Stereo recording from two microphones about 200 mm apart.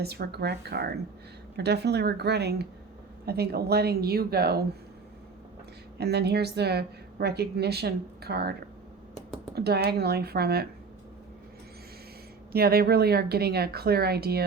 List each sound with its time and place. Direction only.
0.0 s speech: 55° right (ahead or behind)
6.0 s speech: 55° right (ahead or behind)
9.6 s speech: 55° right (ahead or behind)
12.5 s speech: 50° right (ahead or behind)